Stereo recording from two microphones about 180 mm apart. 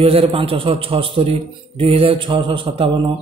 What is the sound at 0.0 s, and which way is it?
A man's voice, 30° right (ahead or behind).